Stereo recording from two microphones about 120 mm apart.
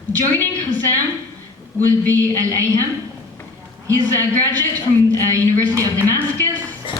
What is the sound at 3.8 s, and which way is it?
A man's voice, 30° right (ahead or behind).